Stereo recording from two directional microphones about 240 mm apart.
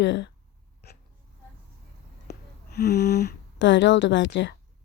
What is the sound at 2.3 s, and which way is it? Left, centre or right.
A woman's voice, left.